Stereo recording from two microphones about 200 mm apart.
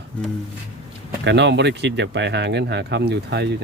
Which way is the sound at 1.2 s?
60° right (ahead or behind).